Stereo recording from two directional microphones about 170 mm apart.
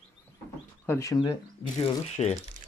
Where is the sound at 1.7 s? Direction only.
40° left (ahead or behind).